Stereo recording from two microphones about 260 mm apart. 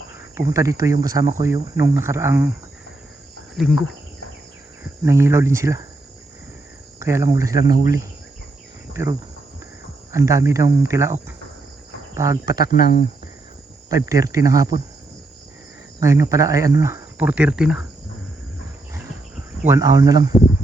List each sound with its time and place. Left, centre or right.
0.3 s speech: centre
3.5 s cricket: centre
4.8 s speech: centre
7.0 s speech: centre
8.9 s cricket: centre
10.1 s speech: centre
12.7 s speech: left
13.9 s speech: centre
16.0 s speech: centre
19.6 s speech: centre